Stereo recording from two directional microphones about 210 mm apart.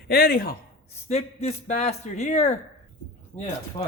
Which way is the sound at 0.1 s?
45° left (ahead or behind).